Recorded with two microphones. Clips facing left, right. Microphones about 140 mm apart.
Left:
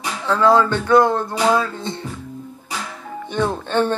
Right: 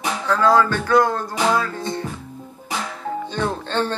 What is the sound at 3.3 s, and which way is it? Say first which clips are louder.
Speech: left 6 dB; 15° left (ahead or behind).